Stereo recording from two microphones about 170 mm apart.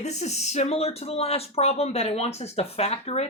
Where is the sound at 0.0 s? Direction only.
40° left (ahead or behind).